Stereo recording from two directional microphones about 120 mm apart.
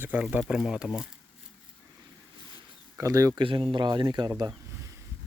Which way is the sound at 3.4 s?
45° right (ahead or behind).